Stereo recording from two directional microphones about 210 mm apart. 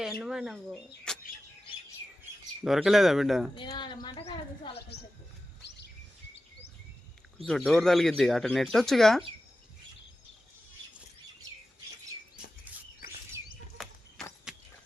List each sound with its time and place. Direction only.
0.0 s speech: centre (ahead or behind)
2.6 s speech: centre (ahead or behind)
3.5 s speech: 20° left (ahead or behind)
5.6 s bird: 50° left (ahead or behind)
7.3 s speech: centre (ahead or behind)
12.7 s a sound: 10° right (ahead or behind)
13.0 s chirp: 40° left (ahead or behind)
13.8 s horse: centre (ahead or behind)